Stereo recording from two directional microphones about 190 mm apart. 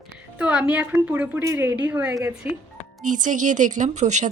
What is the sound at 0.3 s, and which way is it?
Speech, 5° right (ahead or behind).